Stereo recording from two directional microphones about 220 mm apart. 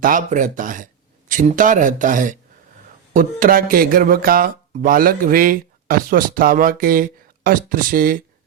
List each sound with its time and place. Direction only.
0.0 s speech: 35° right (ahead or behind)